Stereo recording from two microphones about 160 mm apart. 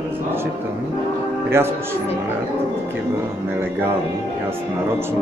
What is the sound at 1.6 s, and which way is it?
Speech, 15° right (ahead or behind).